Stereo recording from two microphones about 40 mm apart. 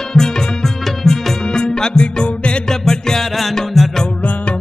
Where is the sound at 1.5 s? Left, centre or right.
Centre.